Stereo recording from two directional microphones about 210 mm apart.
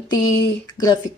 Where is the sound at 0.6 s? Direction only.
20° left (ahead or behind).